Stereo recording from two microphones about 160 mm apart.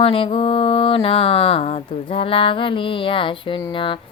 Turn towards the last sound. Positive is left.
turn(degrees=30)  # may be behind; listen again after turning